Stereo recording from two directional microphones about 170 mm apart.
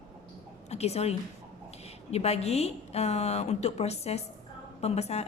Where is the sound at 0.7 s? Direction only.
40° left (ahead or behind).